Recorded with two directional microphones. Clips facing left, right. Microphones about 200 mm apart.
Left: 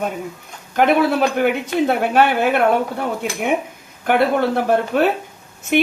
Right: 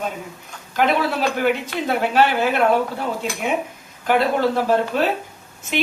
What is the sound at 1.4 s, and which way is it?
Speech, 55° left (ahead or behind).